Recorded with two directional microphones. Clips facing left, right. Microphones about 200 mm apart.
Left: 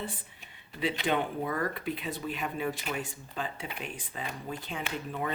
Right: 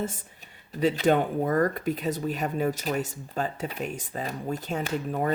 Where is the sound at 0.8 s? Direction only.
45° right (ahead or behind).